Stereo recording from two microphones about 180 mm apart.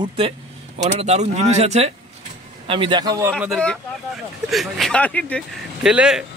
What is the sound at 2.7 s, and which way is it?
Speech, 25° right (ahead or behind).